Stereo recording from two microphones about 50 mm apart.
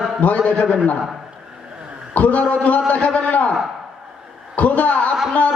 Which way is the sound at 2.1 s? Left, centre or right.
Left.